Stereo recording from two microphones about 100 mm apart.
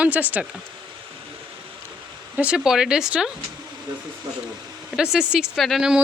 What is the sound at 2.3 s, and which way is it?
Speech, 10° right (ahead or behind).